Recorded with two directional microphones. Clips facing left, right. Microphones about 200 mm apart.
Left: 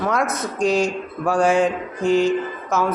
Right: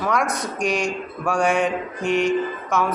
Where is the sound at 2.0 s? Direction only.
30° left (ahead or behind).